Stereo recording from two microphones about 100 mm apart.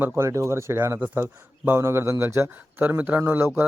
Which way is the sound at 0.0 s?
25° right (ahead or behind).